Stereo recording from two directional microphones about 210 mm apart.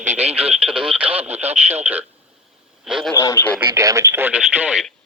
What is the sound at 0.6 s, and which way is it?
Speech, 5° right (ahead or behind).